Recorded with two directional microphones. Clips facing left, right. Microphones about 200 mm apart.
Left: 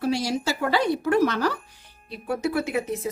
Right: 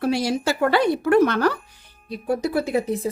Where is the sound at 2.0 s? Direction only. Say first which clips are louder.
Right 3 dB; 40° right (ahead or behind).